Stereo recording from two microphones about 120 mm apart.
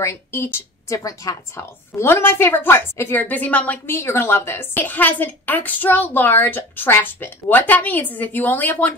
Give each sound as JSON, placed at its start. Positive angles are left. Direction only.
{"t": 0.0, "sound": "a woman's voice", "side_deg": 20}